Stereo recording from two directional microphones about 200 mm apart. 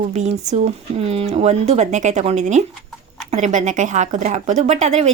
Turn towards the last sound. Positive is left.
turn(degrees=-35)  # may be behind; listen again after turning